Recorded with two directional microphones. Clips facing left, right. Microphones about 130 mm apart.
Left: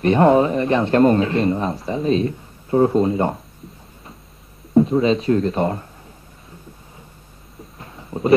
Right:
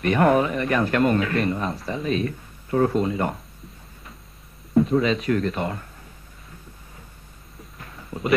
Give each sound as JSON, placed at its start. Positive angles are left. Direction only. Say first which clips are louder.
{"t": 0.0, "sound": "speech", "louder": "left 5 dB", "side_deg": 30}
{"t": 4.7, "sound": "speech", "louder": "left 4 dB", "side_deg": 30}
{"t": 7.8, "sound": "a sound", "louder": "left 6 dB", "side_deg": 25}